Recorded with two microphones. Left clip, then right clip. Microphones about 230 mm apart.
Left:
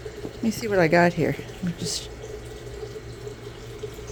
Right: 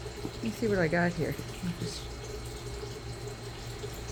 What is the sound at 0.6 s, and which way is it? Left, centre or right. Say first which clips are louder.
Speech: left 9 dB; left.